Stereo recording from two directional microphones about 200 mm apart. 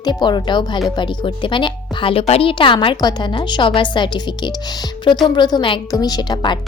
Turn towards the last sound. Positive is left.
turn(degrees=20)  # may be behind; listen again after turning